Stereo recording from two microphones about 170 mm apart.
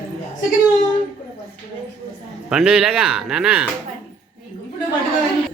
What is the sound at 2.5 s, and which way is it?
Speech, 5° right (ahead or behind).